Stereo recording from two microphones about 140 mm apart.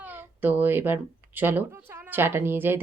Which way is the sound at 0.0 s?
15° right (ahead or behind).